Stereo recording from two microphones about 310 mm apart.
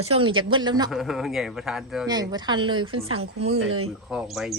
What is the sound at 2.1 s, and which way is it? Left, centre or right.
Speech, centre.